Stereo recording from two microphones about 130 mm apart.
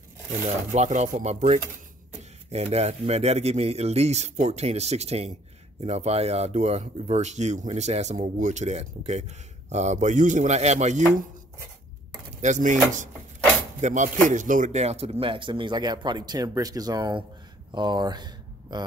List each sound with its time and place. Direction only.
0.7 s speech: 70° right (ahead or behind)
12.3 s speech: 70° right (ahead or behind)
14.3 s speech: 85° right; by 18.9 s 35° right (ahead or behind)